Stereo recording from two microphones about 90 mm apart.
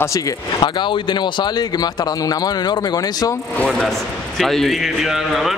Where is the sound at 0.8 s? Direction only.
60° left (ahead or behind).